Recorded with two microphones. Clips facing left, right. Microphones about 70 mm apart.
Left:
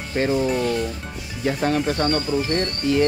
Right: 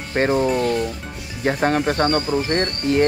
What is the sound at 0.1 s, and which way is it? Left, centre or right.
Speech, right.